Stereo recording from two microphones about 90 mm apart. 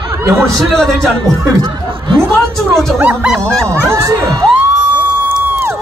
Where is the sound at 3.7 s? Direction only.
35° right (ahead or behind).